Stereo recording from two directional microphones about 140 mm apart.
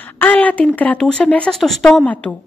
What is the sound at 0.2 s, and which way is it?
Speech, 10° left (ahead or behind).